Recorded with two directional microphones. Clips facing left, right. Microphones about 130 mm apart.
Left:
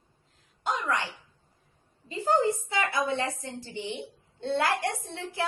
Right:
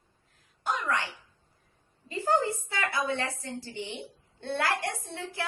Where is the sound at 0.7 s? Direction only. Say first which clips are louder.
Left 1 dB; 15° left (ahead or behind).